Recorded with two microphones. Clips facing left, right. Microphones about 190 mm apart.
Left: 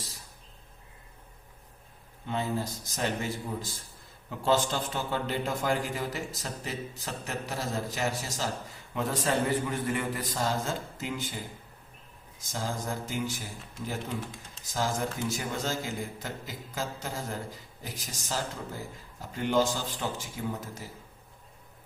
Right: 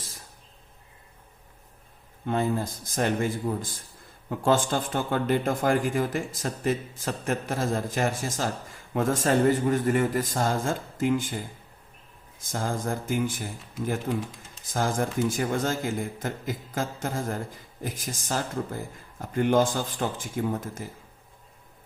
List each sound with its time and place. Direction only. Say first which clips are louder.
2.2 s speech: right 5 dB; 50° right (ahead or behind)
14.6 s speech: right 4 dB; 50° right (ahead or behind)